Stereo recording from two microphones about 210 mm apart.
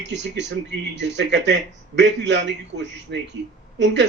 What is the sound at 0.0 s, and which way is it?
A man's voice, 55° right (ahead or behind).